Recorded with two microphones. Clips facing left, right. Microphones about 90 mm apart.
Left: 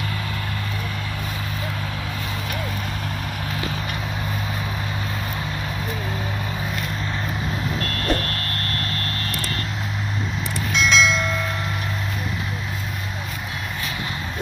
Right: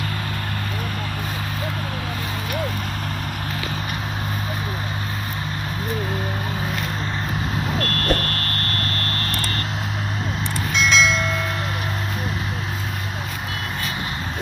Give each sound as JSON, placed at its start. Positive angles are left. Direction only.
{"t": 8.0, "sound": "vehicle", "side_deg": -60}
{"t": 10.7, "sound": "train", "side_deg": 0}